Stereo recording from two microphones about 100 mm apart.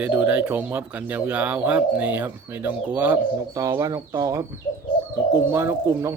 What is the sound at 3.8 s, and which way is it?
Speech, 30° right (ahead or behind).